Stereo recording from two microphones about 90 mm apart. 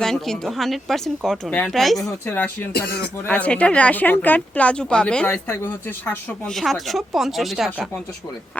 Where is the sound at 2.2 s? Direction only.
20° left (ahead or behind).